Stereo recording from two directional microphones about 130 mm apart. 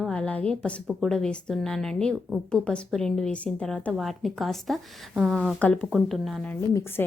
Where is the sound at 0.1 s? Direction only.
10° left (ahead or behind).